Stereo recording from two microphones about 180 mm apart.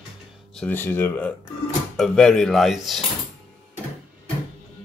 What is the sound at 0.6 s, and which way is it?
Speech, 10° left (ahead or behind).